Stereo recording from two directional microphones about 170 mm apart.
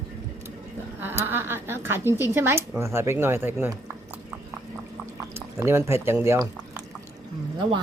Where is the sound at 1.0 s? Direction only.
10° right (ahead or behind).